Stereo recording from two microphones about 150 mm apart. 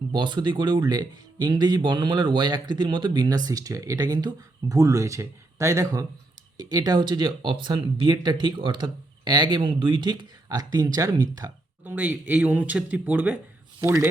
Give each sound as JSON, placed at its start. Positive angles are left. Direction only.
{"t": 0.1, "sound": "speech", "side_deg": -30}
{"t": 11.9, "sound": "speech", "side_deg": -10}